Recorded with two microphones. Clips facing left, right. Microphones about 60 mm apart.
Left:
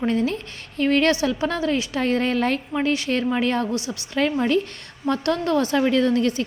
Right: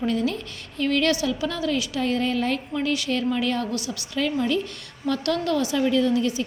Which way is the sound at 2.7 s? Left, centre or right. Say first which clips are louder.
Left 3 dB; left.